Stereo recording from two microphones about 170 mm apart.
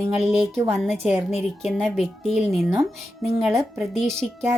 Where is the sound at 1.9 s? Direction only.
Centre (ahead or behind).